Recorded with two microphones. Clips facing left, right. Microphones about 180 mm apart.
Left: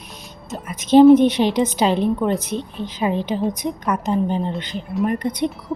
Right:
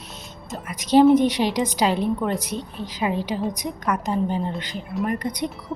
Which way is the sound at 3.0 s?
25° left (ahead or behind).